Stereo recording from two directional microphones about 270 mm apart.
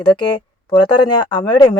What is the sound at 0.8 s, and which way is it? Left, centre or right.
Speech, centre.